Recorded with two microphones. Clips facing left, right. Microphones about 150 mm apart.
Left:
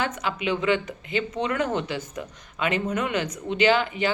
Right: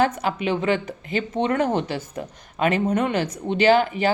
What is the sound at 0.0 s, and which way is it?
Speech, 40° right (ahead or behind).